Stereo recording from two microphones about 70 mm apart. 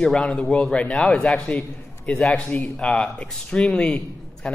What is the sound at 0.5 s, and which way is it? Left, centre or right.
Speech, centre.